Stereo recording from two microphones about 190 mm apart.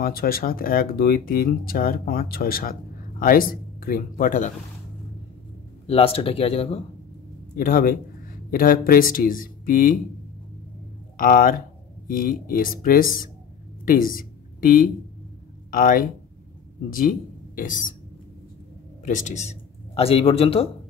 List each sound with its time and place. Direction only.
0.0 s speech: 50° left (ahead or behind)
5.9 s speech: 30° left (ahead or behind)
7.5 s speech: 45° left (ahead or behind)
11.1 s a woman's voice: 45° left (ahead or behind)
17.6 s speech: 45° left (ahead or behind)
19.0 s speech: 40° left (ahead or behind)